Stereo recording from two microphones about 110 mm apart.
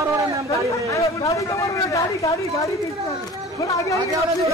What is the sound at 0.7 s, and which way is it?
A man's voice, 30° left (ahead or behind).